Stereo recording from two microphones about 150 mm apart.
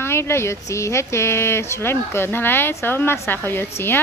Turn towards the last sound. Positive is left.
turn(degrees=15)  # may be behind; listen again after turning